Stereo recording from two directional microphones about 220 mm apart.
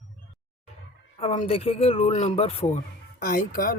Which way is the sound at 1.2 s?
25° left (ahead or behind).